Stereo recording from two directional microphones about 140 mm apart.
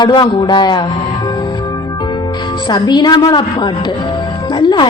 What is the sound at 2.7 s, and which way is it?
A woman's voice, 30° left (ahead or behind).